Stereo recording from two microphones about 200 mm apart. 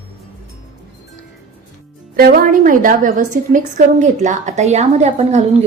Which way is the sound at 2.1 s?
50° right (ahead or behind).